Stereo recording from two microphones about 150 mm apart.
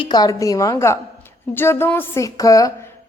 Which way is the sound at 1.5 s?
15° left (ahead or behind).